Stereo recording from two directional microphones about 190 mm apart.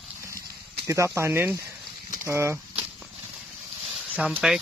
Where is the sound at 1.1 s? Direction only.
10° right (ahead or behind).